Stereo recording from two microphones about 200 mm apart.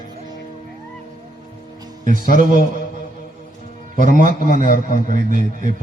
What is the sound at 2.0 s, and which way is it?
Speech, 45° left (ahead or behind).